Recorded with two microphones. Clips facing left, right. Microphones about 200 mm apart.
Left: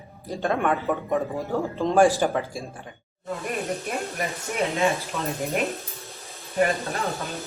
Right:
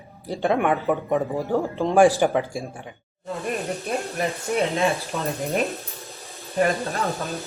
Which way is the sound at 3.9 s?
30° right (ahead or behind).